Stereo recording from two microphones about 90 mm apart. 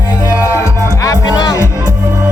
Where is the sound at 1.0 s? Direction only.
45° left (ahead or behind).